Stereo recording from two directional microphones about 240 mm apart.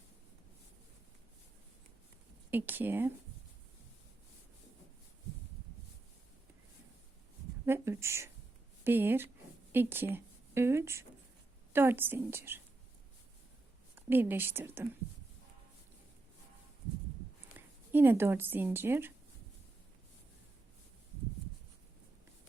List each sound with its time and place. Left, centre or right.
2.5 s a woman's voice: centre
7.6 s a woman's voice: centre
13.9 s speech: centre
17.6 s a sound: centre
17.9 s a woman's voice: centre